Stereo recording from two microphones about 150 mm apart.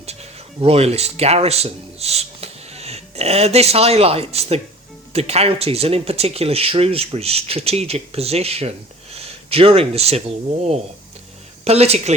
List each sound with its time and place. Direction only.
0.0 s speech: 45° right (ahead or behind)